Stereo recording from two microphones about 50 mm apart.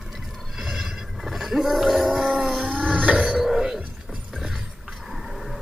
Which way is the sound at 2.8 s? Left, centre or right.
Right.